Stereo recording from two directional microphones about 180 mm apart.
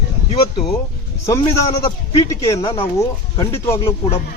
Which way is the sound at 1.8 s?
15° left (ahead or behind).